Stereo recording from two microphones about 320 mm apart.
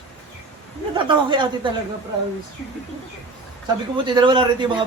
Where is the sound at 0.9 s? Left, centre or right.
Centre.